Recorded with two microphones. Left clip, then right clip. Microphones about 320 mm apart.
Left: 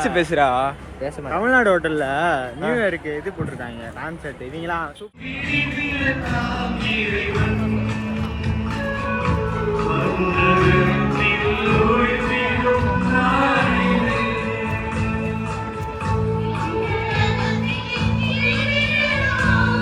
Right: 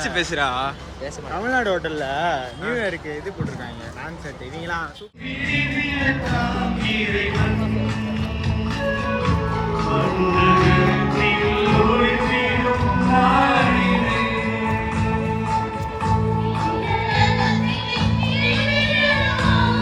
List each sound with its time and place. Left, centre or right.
0.3 s speech: centre
1.3 s speech: centre
5.5 s music: centre
9.7 s music: centre
16.9 s music: centre
17.7 s music: right